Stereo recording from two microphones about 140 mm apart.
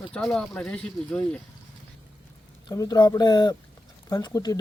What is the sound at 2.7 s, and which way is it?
Speech, 25° left (ahead or behind).